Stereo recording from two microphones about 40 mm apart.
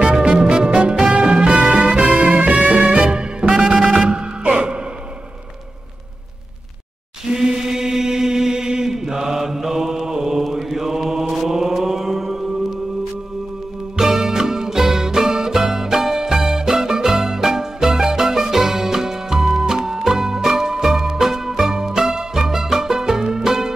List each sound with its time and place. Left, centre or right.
0.0 s music: right
2.1 s music: right
3.0 s music: right
7.3 s chant: centre
13.9 s music: centre